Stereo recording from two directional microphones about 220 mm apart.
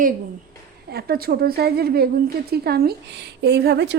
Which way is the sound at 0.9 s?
45° right (ahead or behind).